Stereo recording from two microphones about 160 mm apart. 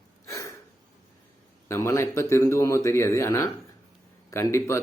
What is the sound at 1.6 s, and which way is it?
Speech, 15° left (ahead or behind).